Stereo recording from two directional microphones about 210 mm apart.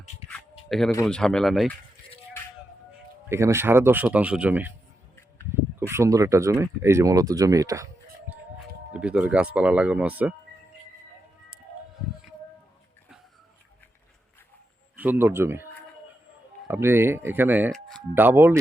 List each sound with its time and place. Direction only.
1.0 s speech: 5° left (ahead or behind)
3.2 s speech: 10° right (ahead or behind)
5.9 s speech: 15° right (ahead or behind)
8.9 s speech: 5° right (ahead or behind)
14.9 s speech: 10° right (ahead or behind)
16.6 s speech: 10° right (ahead or behind)